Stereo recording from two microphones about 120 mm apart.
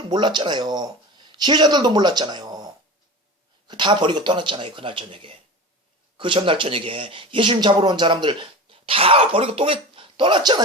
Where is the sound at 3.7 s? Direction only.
40° right (ahead or behind).